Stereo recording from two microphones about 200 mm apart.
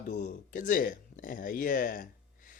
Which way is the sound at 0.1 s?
40° left (ahead or behind).